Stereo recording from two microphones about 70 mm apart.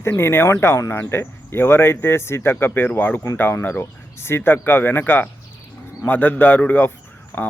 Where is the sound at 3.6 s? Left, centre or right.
Left.